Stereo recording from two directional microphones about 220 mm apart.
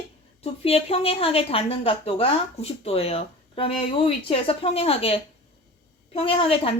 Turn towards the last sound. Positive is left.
turn(degrees=25)  # may be behind; listen again after turning